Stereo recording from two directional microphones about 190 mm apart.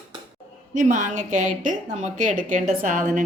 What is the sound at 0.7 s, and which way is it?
A woman's voice, 40° right (ahead or behind).